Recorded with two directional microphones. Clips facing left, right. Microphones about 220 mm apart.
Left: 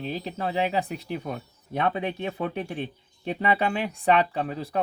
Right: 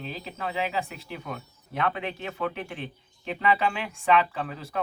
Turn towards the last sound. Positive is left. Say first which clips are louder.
# left 5 dB
turn(degrees=35)  # may be behind; listen again after turning